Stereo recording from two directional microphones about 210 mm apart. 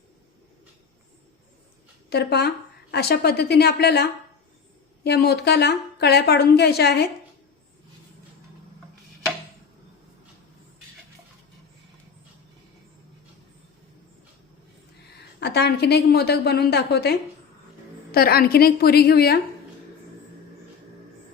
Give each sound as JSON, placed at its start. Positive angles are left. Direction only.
{"t": 2.0, "sound": "a woman's voice", "side_deg": 50}
{"t": 15.4, "sound": "a woman's voice", "side_deg": 50}